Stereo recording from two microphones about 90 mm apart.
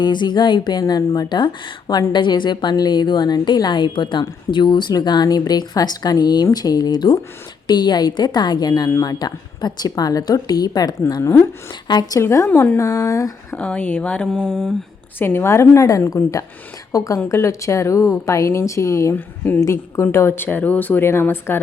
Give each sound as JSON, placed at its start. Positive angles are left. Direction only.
{"t": 0.0, "sound": "speech", "side_deg": 55}
{"t": 11.2, "sound": "speech", "side_deg": 30}
{"t": 11.9, "sound": "speech", "side_deg": 50}
{"t": 12.2, "sound": "a woman's voice", "side_deg": 30}
{"t": 13.6, "sound": "speech", "side_deg": 15}
{"t": 15.2, "sound": "a woman's voice", "side_deg": 25}